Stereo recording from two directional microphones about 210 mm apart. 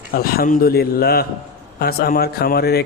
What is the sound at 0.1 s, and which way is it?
A man's voice, 45° left (ahead or behind).